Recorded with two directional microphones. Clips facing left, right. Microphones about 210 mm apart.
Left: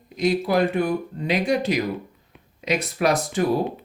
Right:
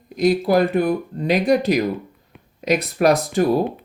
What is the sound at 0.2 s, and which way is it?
Speech, 40° right (ahead or behind).